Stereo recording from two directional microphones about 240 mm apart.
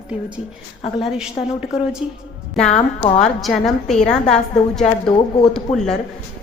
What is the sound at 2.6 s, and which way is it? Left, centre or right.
Speech, left.